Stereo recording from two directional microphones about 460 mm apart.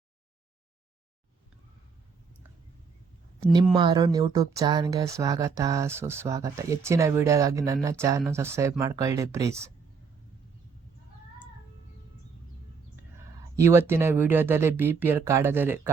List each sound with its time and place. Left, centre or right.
3.5 s speech: centre
13.6 s speech: centre